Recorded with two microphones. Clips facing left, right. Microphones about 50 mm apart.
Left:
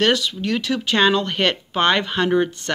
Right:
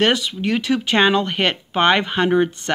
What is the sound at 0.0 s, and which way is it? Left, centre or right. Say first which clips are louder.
Speech: right 1 dB; right.